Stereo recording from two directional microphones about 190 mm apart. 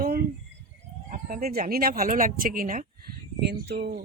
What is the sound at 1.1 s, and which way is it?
Speech, 50° right (ahead or behind).